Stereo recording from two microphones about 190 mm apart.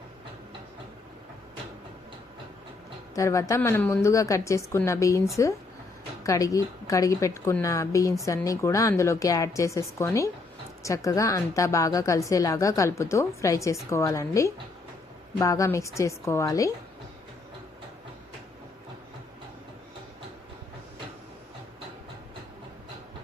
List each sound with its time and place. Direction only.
3.2 s a woman's voice: 15° left (ahead or behind)